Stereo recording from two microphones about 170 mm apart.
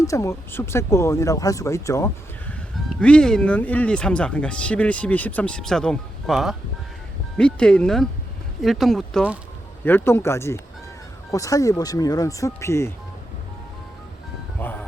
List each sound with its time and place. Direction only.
0.0 s speech: 20° left (ahead or behind)
2.5 s speech: 5° left (ahead or behind)
9.8 s speech: 10° left (ahead or behind)
14.6 s honk: 10° left (ahead or behind)